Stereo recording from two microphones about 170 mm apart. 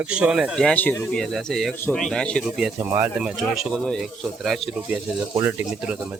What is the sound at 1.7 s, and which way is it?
Speech, 15° left (ahead or behind).